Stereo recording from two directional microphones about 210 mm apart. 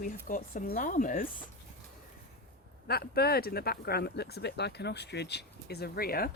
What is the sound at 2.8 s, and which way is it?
Speech, 50° left (ahead or behind).